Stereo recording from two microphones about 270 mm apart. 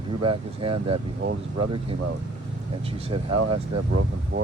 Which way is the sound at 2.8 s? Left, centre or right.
Centre.